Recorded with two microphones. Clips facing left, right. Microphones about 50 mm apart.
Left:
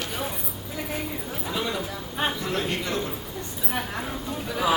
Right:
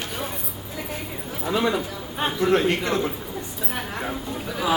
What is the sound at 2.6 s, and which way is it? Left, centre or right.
Speech, centre.